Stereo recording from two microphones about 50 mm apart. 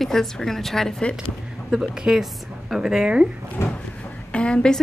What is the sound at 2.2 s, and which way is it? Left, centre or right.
A woman's voice, centre.